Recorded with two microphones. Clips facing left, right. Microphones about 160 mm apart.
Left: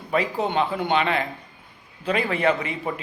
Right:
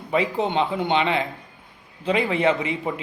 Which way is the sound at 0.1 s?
20° right (ahead or behind).